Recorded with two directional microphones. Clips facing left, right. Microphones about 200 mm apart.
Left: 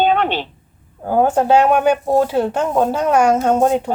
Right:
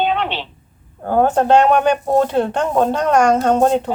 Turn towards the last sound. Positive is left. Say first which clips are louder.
# even
turn(degrees=10)  # may be behind; listen again after turning